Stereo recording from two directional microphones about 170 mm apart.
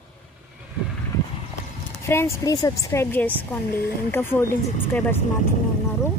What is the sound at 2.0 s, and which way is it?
A woman's voice, 15° left (ahead or behind).